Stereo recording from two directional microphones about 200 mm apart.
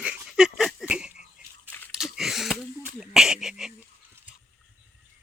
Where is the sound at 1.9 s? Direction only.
Centre (ahead or behind).